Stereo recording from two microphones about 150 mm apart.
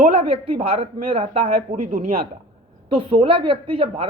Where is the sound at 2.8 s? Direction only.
35° right (ahead or behind).